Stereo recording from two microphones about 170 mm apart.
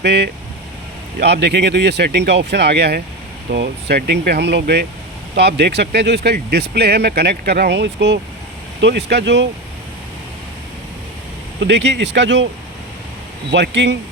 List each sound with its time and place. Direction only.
0.0 s speech: 90° right
1.2 s speech: 80° right
11.6 s speech: 90° right
13.5 s speech: 90° right